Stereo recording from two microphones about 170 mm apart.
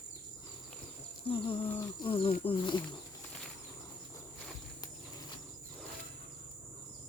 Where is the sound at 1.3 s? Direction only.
30° left (ahead or behind).